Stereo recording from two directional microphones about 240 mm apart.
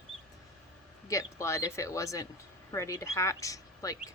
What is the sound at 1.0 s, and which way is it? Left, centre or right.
Speech, centre.